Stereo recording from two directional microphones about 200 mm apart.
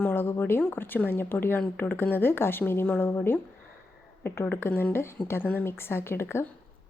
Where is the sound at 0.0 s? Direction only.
10° left (ahead or behind).